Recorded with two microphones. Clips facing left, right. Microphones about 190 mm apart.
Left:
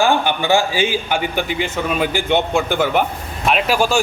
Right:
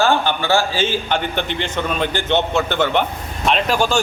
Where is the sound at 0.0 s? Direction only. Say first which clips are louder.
Left 1 dB; 15° left (ahead or behind).